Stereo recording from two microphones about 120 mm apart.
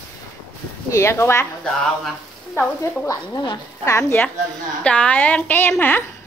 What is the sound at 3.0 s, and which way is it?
Speech, 25° left (ahead or behind).